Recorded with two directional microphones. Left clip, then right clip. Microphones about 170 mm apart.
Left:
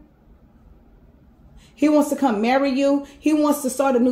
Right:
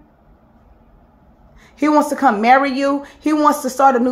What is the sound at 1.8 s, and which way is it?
Speech, 10° left (ahead or behind).